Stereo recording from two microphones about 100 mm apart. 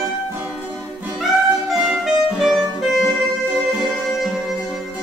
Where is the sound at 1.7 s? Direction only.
Centre (ahead or behind).